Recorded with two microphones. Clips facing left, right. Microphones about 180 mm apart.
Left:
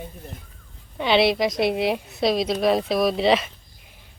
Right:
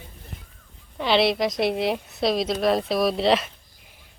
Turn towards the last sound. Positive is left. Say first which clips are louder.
# left 1 dB
turn(degrees=0)  # may be behind; listen again after turning